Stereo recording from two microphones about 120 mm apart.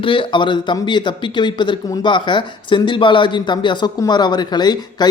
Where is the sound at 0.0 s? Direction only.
45° left (ahead or behind).